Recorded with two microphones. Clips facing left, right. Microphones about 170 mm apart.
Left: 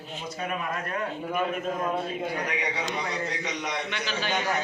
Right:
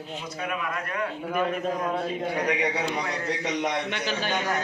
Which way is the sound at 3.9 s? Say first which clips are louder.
Right 2 dB; 50° right (ahead or behind).